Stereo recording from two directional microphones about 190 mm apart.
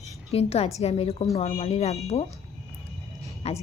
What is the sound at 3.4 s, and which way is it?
Speech, 35° left (ahead or behind).